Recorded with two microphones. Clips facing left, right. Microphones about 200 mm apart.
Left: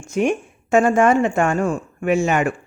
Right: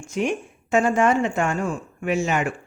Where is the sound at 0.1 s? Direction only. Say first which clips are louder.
Left 5 dB; 50° left (ahead or behind).